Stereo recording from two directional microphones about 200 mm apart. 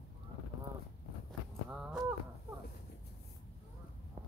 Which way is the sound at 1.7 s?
5° right (ahead or behind).